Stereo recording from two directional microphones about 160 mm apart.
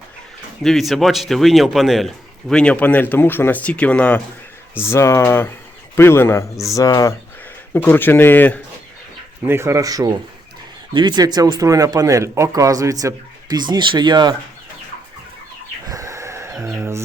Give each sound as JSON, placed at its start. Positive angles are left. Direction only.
{"t": 0.6, "sound": "speech", "side_deg": 0}
{"t": 9.4, "sound": "speech", "side_deg": -15}
{"t": 15.9, "sound": "a sound", "side_deg": -20}